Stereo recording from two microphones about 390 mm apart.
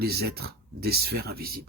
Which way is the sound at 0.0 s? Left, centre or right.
Right.